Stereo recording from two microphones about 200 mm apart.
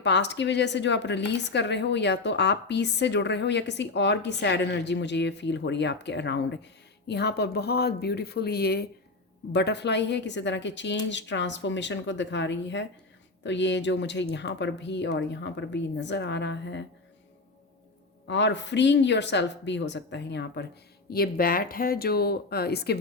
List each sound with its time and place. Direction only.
0.0 s a woman's voice: 60° left (ahead or behind)
18.3 s a woman's voice: 60° left (ahead or behind)
21.1 s speech: 50° left (ahead or behind)